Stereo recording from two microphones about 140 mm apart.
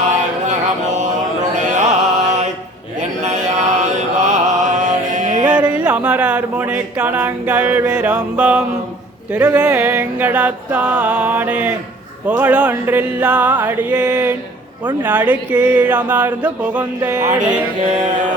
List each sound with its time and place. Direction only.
1.5 s music: 60° right (ahead or behind)
3.0 s mantra: 60° right (ahead or behind)
5.8 s a sound: 10° right (ahead or behind)
17.2 s music: 60° right (ahead or behind)